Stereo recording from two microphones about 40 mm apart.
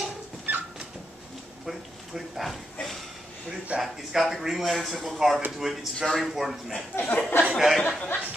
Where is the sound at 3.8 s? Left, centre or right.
Centre.